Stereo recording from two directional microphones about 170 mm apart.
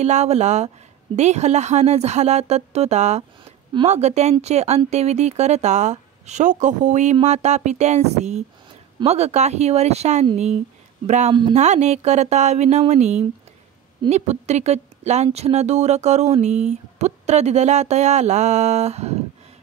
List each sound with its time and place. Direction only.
0.0 s speech: 40° right (ahead or behind)